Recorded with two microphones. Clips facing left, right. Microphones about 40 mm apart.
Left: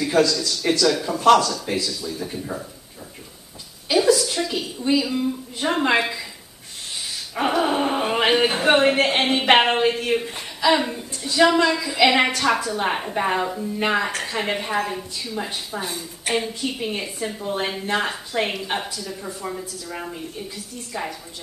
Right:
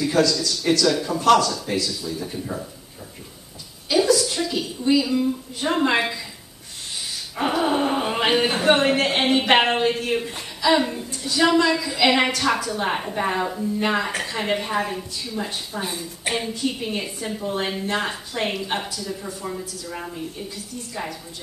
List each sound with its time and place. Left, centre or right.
0.0 s a woman's voice: centre
3.9 s a sound: centre
4.6 s a woman's voice: centre
7.3 s speech: centre
11.1 s a woman's voice: centre
15.8 s a man's voice: centre
16.5 s a woman's voice: centre
17.0 s a man's voice: centre
17.4 s a woman's voice: centre
20.9 s a woman's voice: centre